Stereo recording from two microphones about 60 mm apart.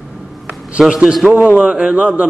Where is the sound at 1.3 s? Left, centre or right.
Right.